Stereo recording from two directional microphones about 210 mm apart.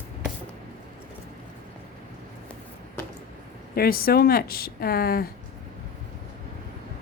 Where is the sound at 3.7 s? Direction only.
45° left (ahead or behind).